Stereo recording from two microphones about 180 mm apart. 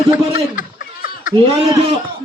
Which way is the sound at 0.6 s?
45° left (ahead or behind).